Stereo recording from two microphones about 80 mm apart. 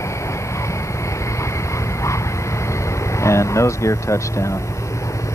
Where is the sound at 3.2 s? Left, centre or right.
Left.